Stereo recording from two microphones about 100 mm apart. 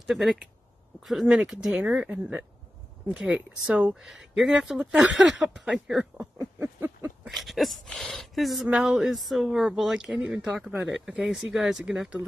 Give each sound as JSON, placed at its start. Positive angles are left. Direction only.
{"t": 0.0, "sound": "speech", "side_deg": 0}
{"t": 6.1, "sound": "a sound", "side_deg": -30}
{"t": 7.2, "sound": "speech", "side_deg": 0}